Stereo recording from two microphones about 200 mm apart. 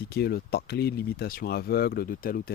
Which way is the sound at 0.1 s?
50° left (ahead or behind).